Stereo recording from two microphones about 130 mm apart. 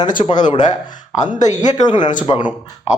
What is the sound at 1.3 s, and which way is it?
Speech, 70° left (ahead or behind).